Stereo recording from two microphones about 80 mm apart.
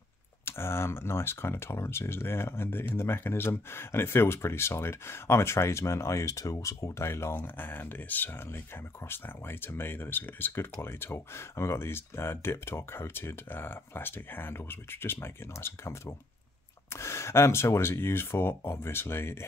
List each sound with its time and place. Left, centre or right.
0.5 s speech: left